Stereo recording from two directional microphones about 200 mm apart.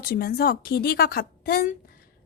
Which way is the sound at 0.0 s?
50° left (ahead or behind).